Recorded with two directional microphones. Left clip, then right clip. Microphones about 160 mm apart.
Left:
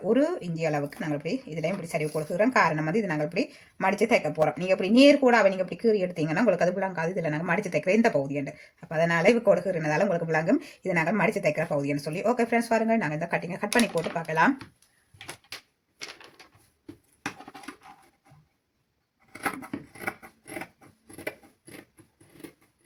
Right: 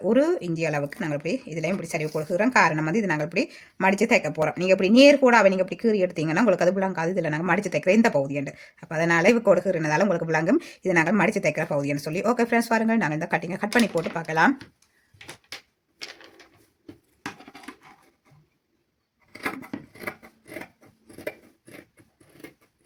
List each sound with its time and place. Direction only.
0.0 s speech: 50° right (ahead or behind)
20.0 s scissors: 15° right (ahead or behind)